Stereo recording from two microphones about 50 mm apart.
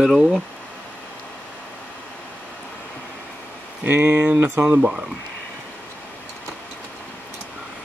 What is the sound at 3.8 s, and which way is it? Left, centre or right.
Speech, right.